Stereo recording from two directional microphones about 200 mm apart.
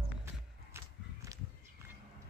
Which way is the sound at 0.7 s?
15° right (ahead or behind).